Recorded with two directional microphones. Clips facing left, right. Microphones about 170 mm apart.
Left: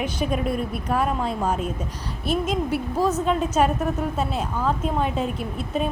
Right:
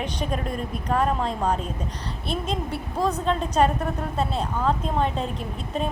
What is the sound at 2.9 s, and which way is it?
Speech, 5° left (ahead or behind).